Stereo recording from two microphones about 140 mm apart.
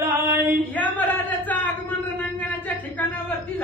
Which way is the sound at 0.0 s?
20° right (ahead or behind).